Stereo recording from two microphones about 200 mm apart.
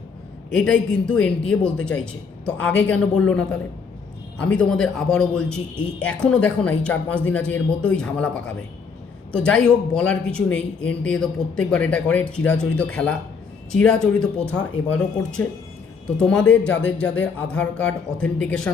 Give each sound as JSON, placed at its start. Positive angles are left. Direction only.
{"t": 0.5, "sound": "a man's voice", "side_deg": 5}